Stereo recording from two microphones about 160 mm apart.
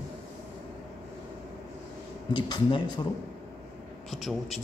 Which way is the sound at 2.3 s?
30° left (ahead or behind).